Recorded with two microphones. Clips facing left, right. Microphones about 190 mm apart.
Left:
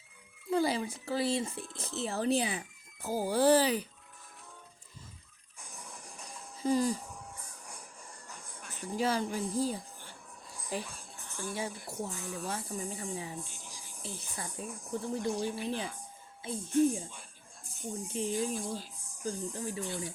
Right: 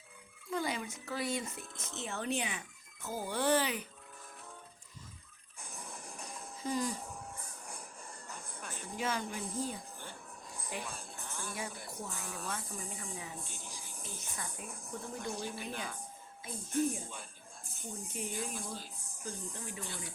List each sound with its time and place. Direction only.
0.5 s speech: 30° left (ahead or behind)
5.6 s music: 55° right (ahead or behind)
6.6 s speech: 30° left (ahead or behind)
7.3 s music: 55° right (ahead or behind)
9.0 s speech: 35° left (ahead or behind)
10.8 s a sound: 60° right (ahead or behind)
11.9 s speech: 35° left (ahead or behind)
13.4 s speech: 60° right (ahead or behind)
14.0 s speech: 30° left (ahead or behind)
18.1 s speech: 30° left (ahead or behind)